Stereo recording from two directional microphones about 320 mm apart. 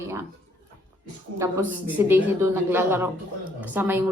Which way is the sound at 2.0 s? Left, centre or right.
Centre.